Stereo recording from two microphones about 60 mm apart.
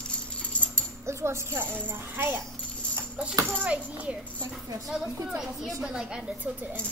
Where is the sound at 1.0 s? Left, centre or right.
Right.